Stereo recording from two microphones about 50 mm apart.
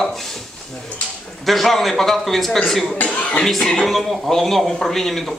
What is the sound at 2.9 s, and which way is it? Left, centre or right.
Speech, left.